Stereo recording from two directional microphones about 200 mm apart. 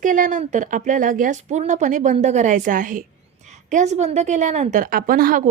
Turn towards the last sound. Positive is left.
turn(degrees=-45)  # may be behind; listen again after turning